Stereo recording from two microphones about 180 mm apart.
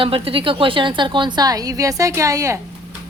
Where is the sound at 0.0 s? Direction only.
30° right (ahead or behind).